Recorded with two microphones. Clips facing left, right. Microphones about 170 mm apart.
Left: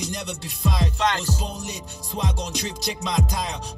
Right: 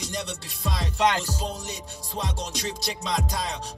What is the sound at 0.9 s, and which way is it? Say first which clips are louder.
Speech: right 5 dB; 10° right (ahead or behind).